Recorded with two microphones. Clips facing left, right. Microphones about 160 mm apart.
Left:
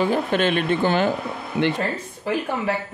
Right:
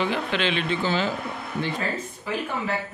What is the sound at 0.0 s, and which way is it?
Speech, 45° left (ahead or behind).